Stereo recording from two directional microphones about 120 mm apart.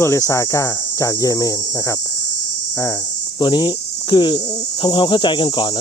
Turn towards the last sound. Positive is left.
turn(degrees=40)  # may be behind; listen again after turning